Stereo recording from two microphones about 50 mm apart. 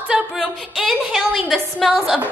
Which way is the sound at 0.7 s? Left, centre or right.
Centre.